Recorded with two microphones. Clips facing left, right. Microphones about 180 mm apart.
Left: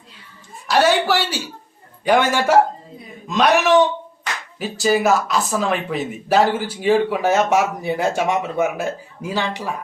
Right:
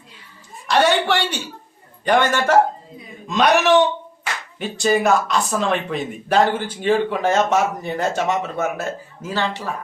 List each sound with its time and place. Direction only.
0.7 s a woman's voice: 5° left (ahead or behind)